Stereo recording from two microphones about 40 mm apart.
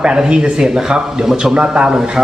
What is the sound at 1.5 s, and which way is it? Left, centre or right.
Speech, right.